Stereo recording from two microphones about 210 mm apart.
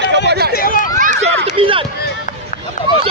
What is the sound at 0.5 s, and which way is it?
Run, 40° left (ahead or behind).